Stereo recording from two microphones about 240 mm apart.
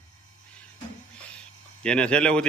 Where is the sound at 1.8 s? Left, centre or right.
Centre.